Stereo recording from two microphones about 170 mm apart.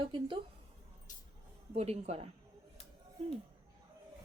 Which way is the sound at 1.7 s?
40° right (ahead or behind).